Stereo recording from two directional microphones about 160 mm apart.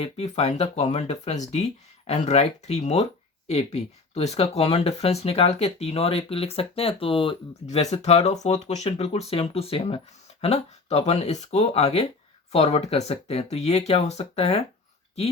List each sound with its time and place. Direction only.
0.0 s speech: 40° left (ahead or behind)